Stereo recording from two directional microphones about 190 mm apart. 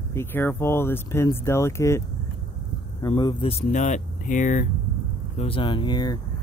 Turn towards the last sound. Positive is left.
turn(degrees=20)  # may be behind; listen again after turning